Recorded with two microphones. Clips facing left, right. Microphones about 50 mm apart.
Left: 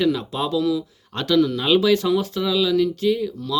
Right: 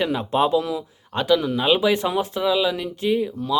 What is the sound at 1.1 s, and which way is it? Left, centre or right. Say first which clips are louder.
Speech: left 1 dB; centre.